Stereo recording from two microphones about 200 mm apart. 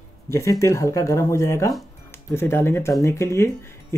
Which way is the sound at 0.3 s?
15° left (ahead or behind).